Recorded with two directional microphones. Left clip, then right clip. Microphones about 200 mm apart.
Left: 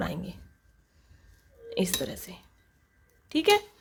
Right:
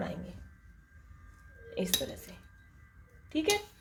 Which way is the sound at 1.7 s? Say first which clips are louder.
Left 3 dB; 35° left (ahead or behind).